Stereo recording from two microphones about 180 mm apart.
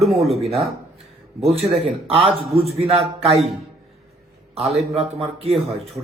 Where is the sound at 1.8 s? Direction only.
30° right (ahead or behind).